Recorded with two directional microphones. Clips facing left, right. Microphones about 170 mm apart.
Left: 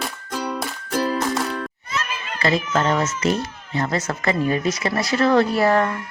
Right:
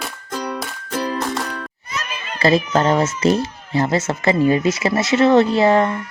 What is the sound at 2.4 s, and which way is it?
A child's voice, 35° right (ahead or behind).